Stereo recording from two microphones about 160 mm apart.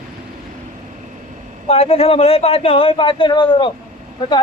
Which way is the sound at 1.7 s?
40° left (ahead or behind).